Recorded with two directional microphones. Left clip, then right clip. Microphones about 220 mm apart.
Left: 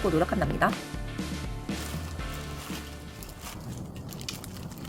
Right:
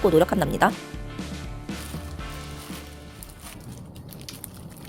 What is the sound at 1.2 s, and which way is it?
Music, centre (ahead or behind).